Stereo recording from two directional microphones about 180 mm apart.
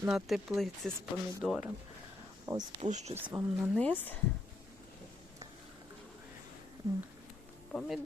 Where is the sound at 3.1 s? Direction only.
10° right (ahead or behind).